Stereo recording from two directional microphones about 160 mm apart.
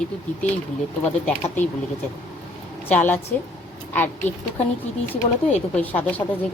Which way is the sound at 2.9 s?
10° left (ahead or behind).